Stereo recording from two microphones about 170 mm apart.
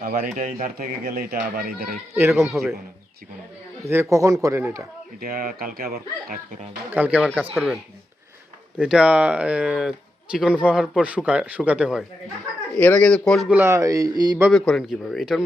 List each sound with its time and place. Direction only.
0.0 s a man's voice: 55° right (ahead or behind)
2.1 s speech: 15° right (ahead or behind)
2.4 s speech: centre (ahead or behind)
3.8 s speech: 15° right (ahead or behind)
5.2 s a man's voice: 60° right (ahead or behind)
6.9 s speech: 10° right (ahead or behind)
8.8 s speech: 5° right (ahead or behind)
12.7 s speech: 5° left (ahead or behind)
13.5 s speech: 15° right (ahead or behind)
14.5 s speech: centre (ahead or behind)